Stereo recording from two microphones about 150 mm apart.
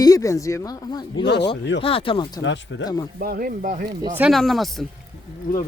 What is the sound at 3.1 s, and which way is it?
Speech, 75° right (ahead or behind).